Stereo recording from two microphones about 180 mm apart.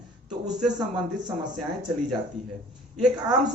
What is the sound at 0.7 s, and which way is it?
Speech, 25° right (ahead or behind).